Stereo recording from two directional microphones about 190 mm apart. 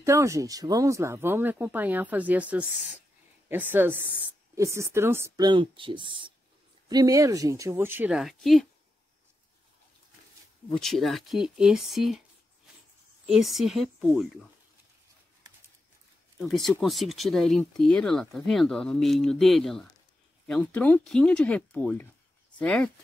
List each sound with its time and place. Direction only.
0.0 s speech: 15° right (ahead or behind); by 8.6 s centre (ahead or behind)
10.7 s speech: centre (ahead or behind)
13.3 s speech: centre (ahead or behind)
16.3 s speech: centre (ahead or behind)